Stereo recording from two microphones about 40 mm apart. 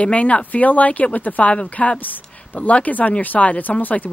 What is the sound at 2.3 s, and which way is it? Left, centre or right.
Speech, left.